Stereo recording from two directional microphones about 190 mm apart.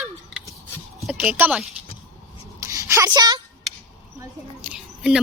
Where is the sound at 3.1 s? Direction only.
20° right (ahead or behind).